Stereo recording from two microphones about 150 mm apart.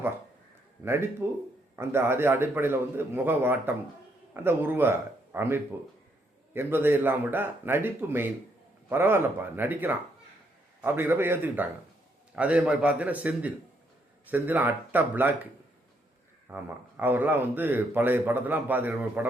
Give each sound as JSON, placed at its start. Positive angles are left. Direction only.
{"t": 1.2, "sound": "a man's voice", "side_deg": -15}
{"t": 16.5, "sound": "a man's voice", "side_deg": -15}